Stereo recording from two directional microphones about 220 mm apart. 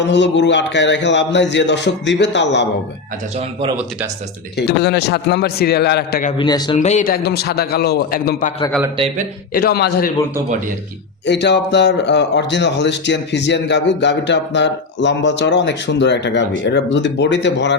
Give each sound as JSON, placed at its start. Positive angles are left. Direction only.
{"t": 0.1, "sound": "speech", "side_deg": 55}
{"t": 4.5, "sound": "speech", "side_deg": 50}
{"t": 6.3, "sound": "speech", "side_deg": 20}
{"t": 6.7, "sound": "speech", "side_deg": 35}
{"t": 9.0, "sound": "a man's voice", "side_deg": -30}
{"t": 9.5, "sound": "speech", "side_deg": 45}
{"t": 11.3, "sound": "speech", "side_deg": 50}